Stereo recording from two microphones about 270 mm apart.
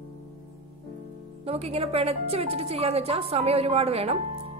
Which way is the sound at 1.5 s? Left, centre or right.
Right.